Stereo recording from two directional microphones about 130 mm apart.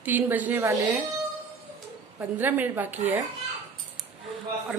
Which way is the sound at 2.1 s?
15° right (ahead or behind).